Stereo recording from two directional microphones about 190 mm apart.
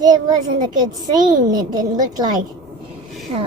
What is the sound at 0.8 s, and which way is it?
A woman's voice, 20° right (ahead or behind).